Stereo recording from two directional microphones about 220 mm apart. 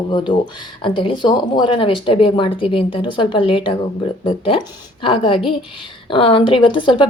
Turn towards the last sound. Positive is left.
turn(degrees=20)  # may be behind; listen again after turning